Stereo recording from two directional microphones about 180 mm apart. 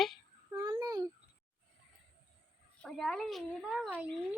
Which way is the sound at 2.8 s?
Centre (ahead or behind).